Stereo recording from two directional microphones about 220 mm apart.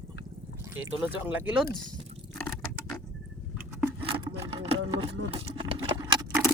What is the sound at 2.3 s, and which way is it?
Water, 5° left (ahead or behind).